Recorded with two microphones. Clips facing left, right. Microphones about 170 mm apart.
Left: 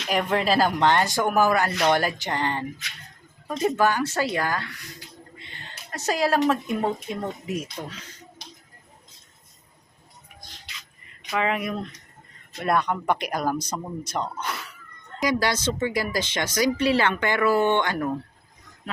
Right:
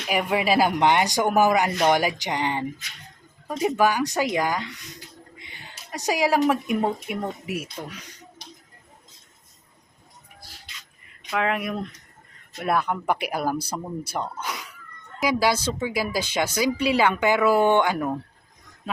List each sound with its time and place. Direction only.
0.1 s speech: 10° right (ahead or behind)
10.4 s music: 5° right (ahead or behind)
11.3 s speech: centre (ahead or behind)